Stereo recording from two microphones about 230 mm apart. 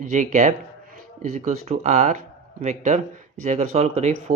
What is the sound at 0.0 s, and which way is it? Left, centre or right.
Speech, right.